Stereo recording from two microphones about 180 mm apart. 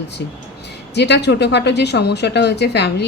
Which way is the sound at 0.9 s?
70° left (ahead or behind).